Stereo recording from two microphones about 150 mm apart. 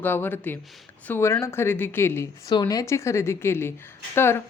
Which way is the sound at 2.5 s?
25° left (ahead or behind).